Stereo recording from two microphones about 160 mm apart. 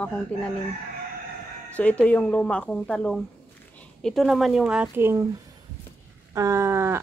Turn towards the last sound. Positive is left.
turn(degrees=-15)  # may be behind; listen again after turning